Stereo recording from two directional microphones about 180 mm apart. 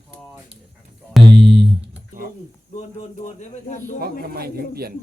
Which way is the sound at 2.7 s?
40° left (ahead or behind).